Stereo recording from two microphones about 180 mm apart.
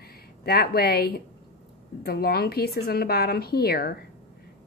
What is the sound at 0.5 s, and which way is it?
Speech, 60° left (ahead or behind).